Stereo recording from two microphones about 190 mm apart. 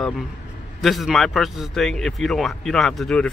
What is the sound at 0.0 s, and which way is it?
A man's voice, centre (ahead or behind).